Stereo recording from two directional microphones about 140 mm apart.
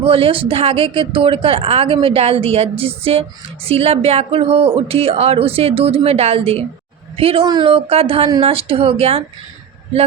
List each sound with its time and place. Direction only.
0.0 s speech: 40° right (ahead or behind)